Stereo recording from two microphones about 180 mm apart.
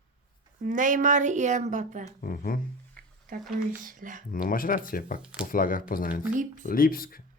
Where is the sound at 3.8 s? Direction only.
50° right (ahead or behind).